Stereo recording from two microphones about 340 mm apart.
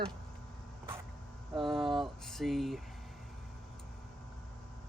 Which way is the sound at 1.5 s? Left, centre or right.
Centre.